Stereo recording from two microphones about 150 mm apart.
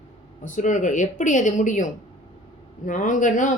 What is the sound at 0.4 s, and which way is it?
Speech, 55° left (ahead or behind).